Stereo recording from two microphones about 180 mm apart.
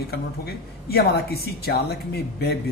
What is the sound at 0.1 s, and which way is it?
A woman's voice, 60° left (ahead or behind).